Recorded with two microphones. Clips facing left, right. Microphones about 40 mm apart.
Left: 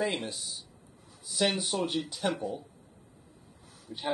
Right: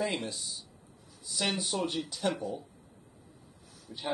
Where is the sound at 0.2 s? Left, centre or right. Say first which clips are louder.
Even; centre.